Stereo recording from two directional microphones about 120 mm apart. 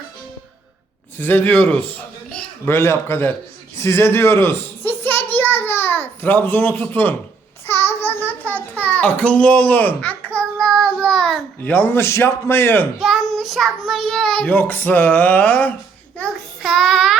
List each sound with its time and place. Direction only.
1.2 s a man's voice: 15° left (ahead or behind)
3.8 s a sound: 20° left (ahead or behind)
7.7 s child singing: 20° left (ahead or behind); by 11.4 s 5° left (ahead or behind)
11.6 s a man's voice: 15° left (ahead or behind)
13.0 s a child's voice: centre (ahead or behind)
16.1 s child singing: 5° left (ahead or behind)